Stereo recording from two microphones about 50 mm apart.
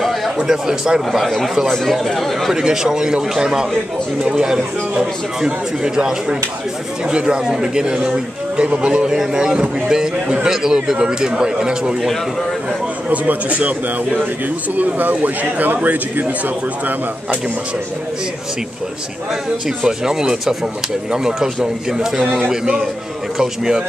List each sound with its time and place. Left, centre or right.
0.0 s speech: centre
0.5 s a man's voice: centre
1.1 s speech: centre
2.5 s a man's voice: centre
13.1 s a man's voice: right
19.8 s a man's voice: centre